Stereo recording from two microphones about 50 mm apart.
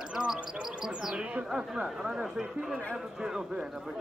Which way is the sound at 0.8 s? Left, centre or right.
Centre.